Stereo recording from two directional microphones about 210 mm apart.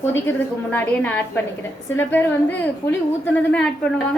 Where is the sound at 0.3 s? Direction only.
10° left (ahead or behind).